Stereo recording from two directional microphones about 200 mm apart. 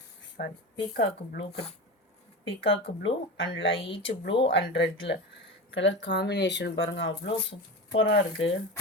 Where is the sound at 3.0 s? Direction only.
75° left (ahead or behind).